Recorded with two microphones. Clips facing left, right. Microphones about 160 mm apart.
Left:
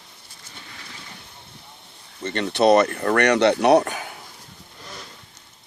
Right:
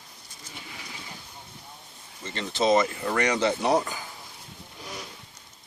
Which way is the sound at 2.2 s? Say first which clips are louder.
Left 7 dB; 65° left (ahead or behind).